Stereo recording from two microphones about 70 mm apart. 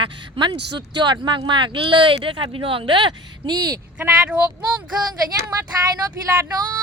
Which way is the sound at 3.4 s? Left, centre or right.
Right.